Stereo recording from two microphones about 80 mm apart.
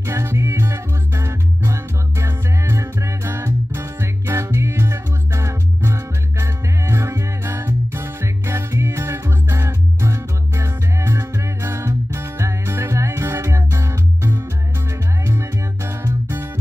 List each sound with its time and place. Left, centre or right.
0.0 s music: right